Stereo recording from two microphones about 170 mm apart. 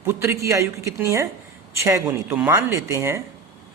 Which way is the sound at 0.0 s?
15° right (ahead or behind).